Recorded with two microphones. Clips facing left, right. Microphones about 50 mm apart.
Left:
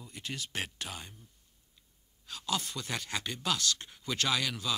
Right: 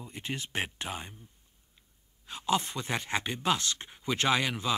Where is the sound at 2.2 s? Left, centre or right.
Right.